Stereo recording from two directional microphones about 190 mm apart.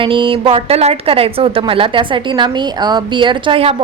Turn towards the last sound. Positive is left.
turn(degrees=-25)  # may be behind; listen again after turning